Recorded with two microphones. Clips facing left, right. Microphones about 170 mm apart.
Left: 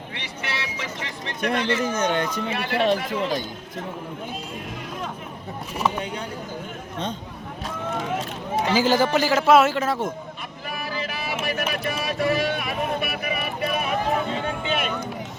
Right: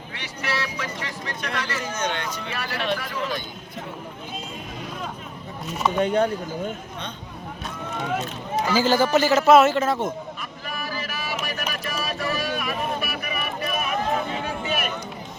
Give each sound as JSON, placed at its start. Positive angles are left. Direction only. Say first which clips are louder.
{"t": 0.2, "sound": "vehicle", "louder": "right 4 dB", "side_deg": 25}
{"t": 1.5, "sound": "speech", "louder": "left 8 dB", "side_deg": 25}
{"t": 1.9, "sound": "speech", "louder": "left 5 dB", "side_deg": 50}
{"t": 2.5, "sound": "speech", "louder": "left 5 dB", "side_deg": 25}
{"t": 5.7, "sound": "a man's voice", "louder": "right 4 dB", "side_deg": 10}
{"t": 8.6, "sound": "a man's voice", "louder": "even", "side_deg": 15}
{"t": 10.7, "sound": "a sound", "louder": "left 2 dB", "side_deg": 25}